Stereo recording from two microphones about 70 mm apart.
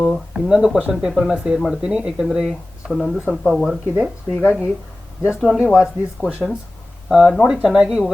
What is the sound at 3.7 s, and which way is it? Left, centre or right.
Speech, centre.